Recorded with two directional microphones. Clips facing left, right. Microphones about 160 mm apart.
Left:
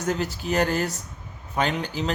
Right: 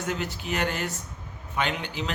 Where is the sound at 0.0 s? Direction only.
40° left (ahead or behind).